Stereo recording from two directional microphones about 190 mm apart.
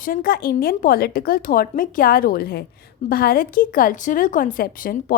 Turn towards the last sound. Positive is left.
turn(degrees=50)  # may be behind; listen again after turning